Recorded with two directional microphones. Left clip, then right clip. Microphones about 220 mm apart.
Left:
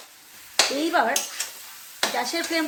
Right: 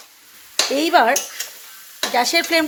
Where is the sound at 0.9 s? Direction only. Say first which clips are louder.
Right 7 dB; 40° right (ahead or behind).